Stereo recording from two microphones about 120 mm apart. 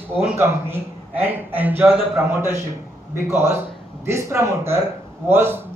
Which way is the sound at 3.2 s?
20° right (ahead or behind).